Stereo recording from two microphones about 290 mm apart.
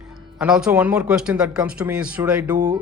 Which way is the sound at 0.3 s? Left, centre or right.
Centre.